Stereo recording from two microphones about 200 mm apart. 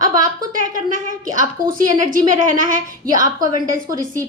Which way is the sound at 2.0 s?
40° right (ahead or behind).